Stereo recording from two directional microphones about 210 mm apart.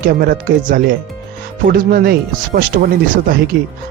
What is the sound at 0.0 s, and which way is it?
Speech, 45° right (ahead or behind).